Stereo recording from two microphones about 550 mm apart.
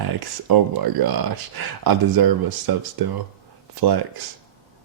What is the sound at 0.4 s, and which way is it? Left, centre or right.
Speech, right.